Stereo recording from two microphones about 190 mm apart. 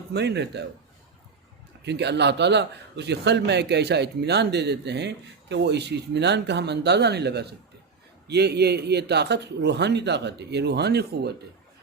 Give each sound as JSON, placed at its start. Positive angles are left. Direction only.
{"t": 0.1, "sound": "a man's voice", "side_deg": -65}
{"t": 1.8, "sound": "a man's voice", "side_deg": -65}